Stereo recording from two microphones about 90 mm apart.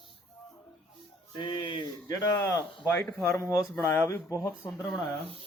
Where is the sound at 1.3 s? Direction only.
65° left (ahead or behind).